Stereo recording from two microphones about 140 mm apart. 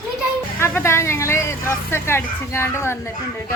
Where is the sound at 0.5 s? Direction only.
20° left (ahead or behind).